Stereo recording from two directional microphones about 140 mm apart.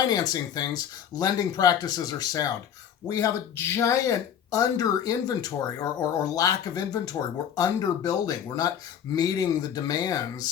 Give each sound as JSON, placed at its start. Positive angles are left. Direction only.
{"t": 0.1, "sound": "speech", "side_deg": 25}